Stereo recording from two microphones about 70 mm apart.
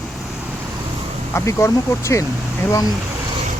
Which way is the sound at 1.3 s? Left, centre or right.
Left.